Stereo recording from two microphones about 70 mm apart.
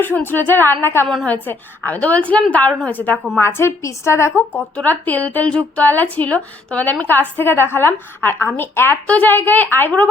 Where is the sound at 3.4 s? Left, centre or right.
Left.